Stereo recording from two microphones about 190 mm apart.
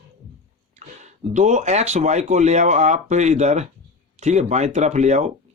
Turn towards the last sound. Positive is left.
turn(degrees=-35)  # may be behind; listen again after turning